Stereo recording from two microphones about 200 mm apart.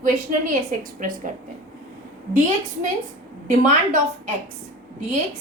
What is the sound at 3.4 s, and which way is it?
Speech, 40° right (ahead or behind).